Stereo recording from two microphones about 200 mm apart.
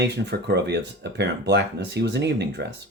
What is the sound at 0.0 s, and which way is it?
Speech, 60° right (ahead or behind).